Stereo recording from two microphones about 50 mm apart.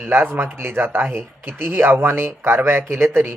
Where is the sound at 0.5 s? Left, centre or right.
Right.